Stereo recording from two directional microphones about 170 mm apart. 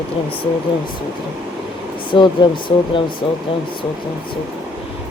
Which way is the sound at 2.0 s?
30° left (ahead or behind).